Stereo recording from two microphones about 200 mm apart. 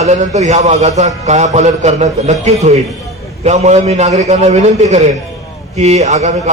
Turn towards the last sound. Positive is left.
turn(degrees=-35)  # may be behind; listen again after turning